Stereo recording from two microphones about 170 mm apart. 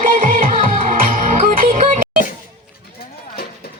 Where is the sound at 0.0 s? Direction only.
50° right (ahead or behind).